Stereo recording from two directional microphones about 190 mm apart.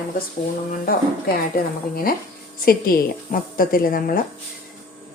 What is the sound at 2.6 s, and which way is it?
A woman's voice, 50° left (ahead or behind).